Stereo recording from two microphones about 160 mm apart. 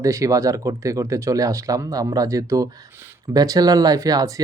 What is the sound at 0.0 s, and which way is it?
Speech, 20° right (ahead or behind).